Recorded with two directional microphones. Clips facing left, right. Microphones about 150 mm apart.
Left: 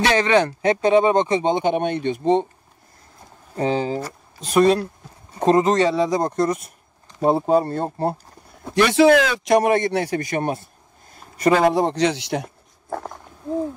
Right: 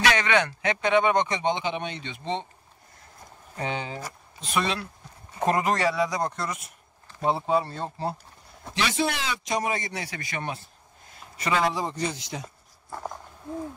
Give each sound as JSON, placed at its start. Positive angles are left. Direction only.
{"t": 0.0, "sound": "speech", "side_deg": 30}
{"t": 1.6, "sound": "speech", "side_deg": 50}
{"t": 3.5, "sound": "speech", "side_deg": 35}
{"t": 5.4, "sound": "speech", "side_deg": 25}
{"t": 6.3, "sound": "speech", "side_deg": 40}
{"t": 9.0, "sound": "speech", "side_deg": 85}